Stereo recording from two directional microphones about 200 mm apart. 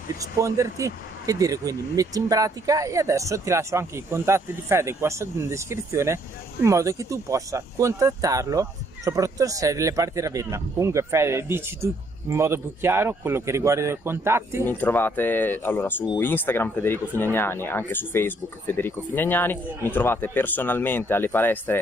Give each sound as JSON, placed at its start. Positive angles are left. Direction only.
{"t": 0.2, "sound": "speech", "side_deg": -15}
{"t": 14.7, "sound": "speech", "side_deg": 10}